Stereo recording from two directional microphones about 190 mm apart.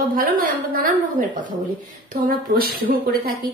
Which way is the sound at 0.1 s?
45° right (ahead or behind).